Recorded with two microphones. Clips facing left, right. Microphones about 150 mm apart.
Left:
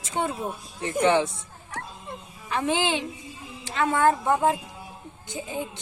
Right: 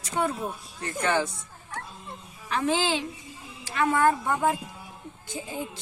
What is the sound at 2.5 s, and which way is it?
A child's voice, 20° left (ahead or behind).